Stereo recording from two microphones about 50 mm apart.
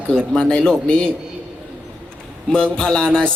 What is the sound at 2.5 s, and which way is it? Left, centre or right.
Speech, centre.